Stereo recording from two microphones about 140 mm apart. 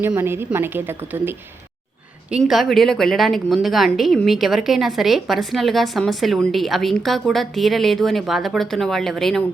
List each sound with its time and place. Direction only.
0.0 s a woman's voice: 15° right (ahead or behind)
2.4 s a woman's voice: centre (ahead or behind)